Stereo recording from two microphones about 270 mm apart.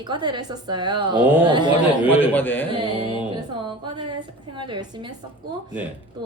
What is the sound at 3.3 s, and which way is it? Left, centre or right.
A woman's voice, centre.